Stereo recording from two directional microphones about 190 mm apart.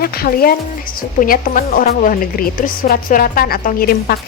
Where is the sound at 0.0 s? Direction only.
50° left (ahead or behind).